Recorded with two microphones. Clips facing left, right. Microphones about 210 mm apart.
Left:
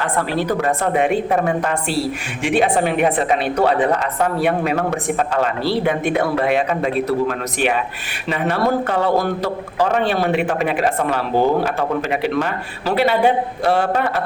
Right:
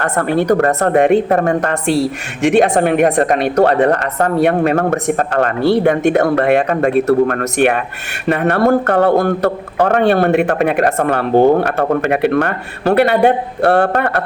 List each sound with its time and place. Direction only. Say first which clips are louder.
0.0 s speech: right 5 dB; 60° right (ahead or behind)